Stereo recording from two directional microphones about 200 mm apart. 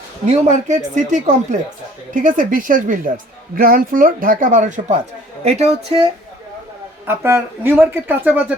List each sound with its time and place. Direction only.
0.3 s speech: 35° right (ahead or behind)
7.1 s speech: 10° right (ahead or behind)